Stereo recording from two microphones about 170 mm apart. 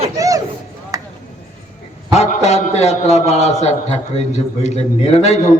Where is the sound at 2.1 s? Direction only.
40° left (ahead or behind).